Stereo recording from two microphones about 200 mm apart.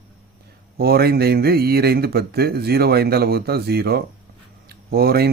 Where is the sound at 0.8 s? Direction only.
50° right (ahead or behind).